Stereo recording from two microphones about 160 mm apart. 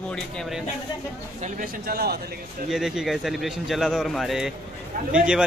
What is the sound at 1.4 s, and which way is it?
Speech, 65° right (ahead or behind).